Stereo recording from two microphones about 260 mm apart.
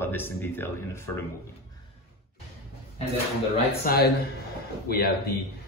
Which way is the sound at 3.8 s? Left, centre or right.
Left.